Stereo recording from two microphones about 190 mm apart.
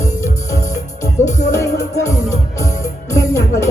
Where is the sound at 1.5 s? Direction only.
15° left (ahead or behind).